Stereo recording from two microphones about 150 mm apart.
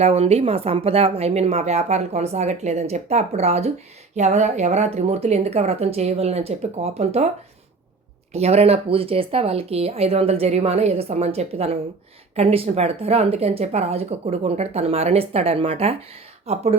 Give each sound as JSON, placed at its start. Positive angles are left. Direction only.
{"t": 0.0, "sound": "a woman's voice", "side_deg": -45}
{"t": 8.3, "sound": "a woman's voice", "side_deg": -45}